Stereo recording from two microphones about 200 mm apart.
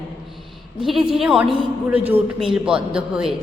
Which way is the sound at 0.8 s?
Centre (ahead or behind).